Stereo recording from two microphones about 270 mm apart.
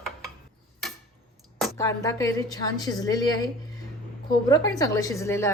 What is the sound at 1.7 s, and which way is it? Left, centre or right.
A woman's voice, centre.